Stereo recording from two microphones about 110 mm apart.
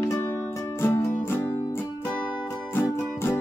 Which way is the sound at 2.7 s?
20° left (ahead or behind).